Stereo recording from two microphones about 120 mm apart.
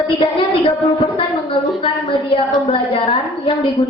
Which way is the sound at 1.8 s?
50° left (ahead or behind).